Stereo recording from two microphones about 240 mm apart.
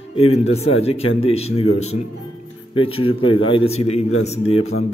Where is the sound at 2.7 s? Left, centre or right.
Left.